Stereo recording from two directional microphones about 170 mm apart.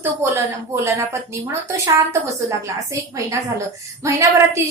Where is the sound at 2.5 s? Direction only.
20° right (ahead or behind).